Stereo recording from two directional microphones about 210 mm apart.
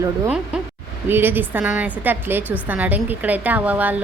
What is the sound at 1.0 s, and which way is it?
A woman's voice, 10° right (ahead or behind).